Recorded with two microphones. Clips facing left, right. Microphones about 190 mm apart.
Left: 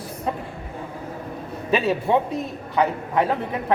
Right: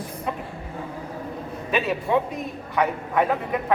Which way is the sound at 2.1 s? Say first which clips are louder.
Left 2 dB; 30° left (ahead or behind).